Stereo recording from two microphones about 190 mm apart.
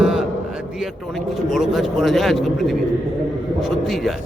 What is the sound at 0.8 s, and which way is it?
Speech, centre (ahead or behind).